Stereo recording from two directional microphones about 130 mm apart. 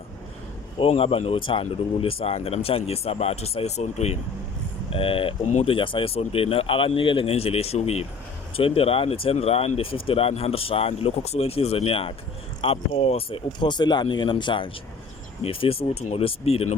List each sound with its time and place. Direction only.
0.8 s speech: 50° left (ahead or behind)
5.5 s speech: 60° left (ahead or behind)
5.7 s speech: 40° left (ahead or behind)